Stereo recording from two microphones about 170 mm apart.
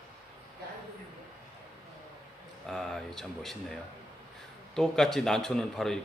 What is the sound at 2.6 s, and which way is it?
Speech, centre (ahead or behind).